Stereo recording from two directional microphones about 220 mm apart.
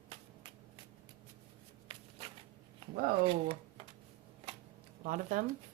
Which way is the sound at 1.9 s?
25° right (ahead or behind).